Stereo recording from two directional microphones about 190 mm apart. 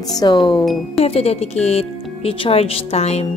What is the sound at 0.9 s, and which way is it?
Speech, 30° left (ahead or behind).